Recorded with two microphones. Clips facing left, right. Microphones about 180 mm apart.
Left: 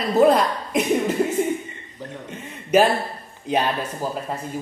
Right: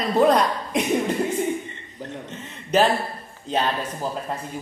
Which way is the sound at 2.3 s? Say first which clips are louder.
Left 4 dB; 10° left (ahead or behind).